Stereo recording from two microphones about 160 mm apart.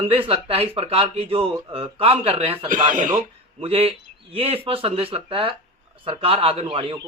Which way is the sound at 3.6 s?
40° right (ahead or behind).